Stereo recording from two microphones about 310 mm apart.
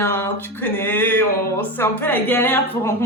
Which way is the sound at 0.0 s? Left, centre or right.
Centre.